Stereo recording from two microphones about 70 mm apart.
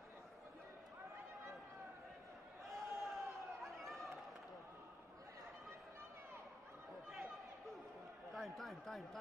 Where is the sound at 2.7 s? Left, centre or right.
Centre.